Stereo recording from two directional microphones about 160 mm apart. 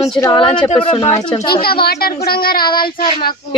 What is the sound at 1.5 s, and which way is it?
A woman's voice, 70° left (ahead or behind).